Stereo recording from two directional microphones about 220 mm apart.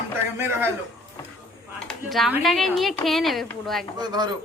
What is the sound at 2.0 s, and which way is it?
A woman's voice, centre (ahead or behind).